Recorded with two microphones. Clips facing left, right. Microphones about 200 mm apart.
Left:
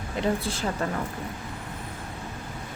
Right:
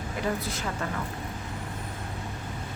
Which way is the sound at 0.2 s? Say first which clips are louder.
Left 4 dB; 30° left (ahead or behind).